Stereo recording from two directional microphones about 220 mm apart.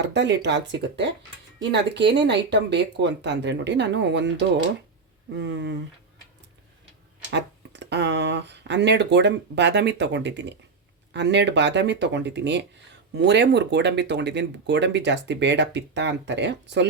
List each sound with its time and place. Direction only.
0.0 s speech: 55° right (ahead or behind)
7.3 s speech: 50° right (ahead or behind)